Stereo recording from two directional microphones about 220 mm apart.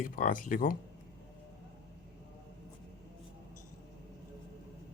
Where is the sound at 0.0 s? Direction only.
40° left (ahead or behind).